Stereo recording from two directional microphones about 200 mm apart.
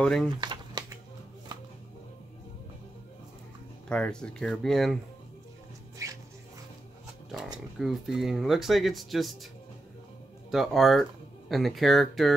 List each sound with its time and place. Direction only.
0.0 s speech: 5° left (ahead or behind)
0.4 s a sound: 20° right (ahead or behind)
3.9 s speech: 5° left (ahead or behind)
7.8 s speech: centre (ahead or behind)
10.5 s speech: centre (ahead or behind)